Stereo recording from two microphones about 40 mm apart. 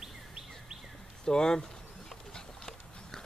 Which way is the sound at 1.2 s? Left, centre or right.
Centre.